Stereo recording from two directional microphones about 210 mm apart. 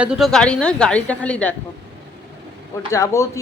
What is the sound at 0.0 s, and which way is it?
A woman's voice, centre (ahead or behind).